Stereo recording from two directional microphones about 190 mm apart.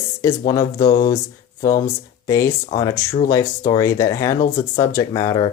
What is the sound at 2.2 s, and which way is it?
Speech, 15° left (ahead or behind).